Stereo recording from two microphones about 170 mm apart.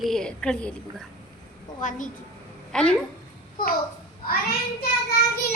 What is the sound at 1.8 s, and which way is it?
Speech, 50° left (ahead or behind).